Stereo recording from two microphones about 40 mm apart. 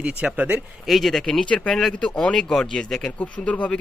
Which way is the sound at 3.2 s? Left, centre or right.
Left.